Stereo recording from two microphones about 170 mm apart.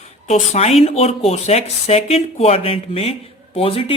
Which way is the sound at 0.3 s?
40° left (ahead or behind).